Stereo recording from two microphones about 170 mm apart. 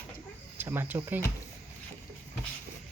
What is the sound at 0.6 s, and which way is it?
Speech, 10° right (ahead or behind).